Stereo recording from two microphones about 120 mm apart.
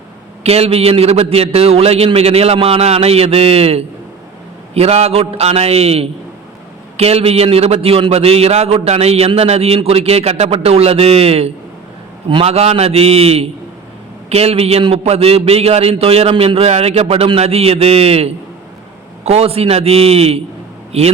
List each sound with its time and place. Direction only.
0.4 s a man's voice: 60° right (ahead or behind)